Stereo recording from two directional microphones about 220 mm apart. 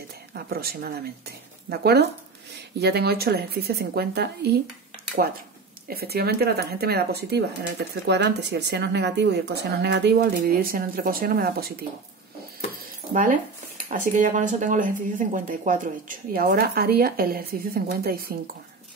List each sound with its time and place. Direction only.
0.3 s speech: 45° right (ahead or behind)
5.9 s speech: 45° right (ahead or behind)
13.1 s speech: 35° right (ahead or behind)